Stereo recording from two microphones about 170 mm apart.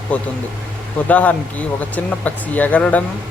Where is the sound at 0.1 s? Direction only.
10° left (ahead or behind).